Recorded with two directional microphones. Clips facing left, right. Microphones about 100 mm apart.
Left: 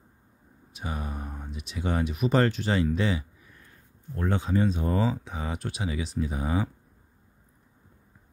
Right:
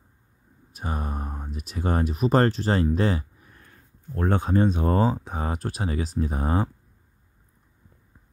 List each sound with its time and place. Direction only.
0.7 s speech: 45° right (ahead or behind)
5.0 s speech: 45° right (ahead or behind)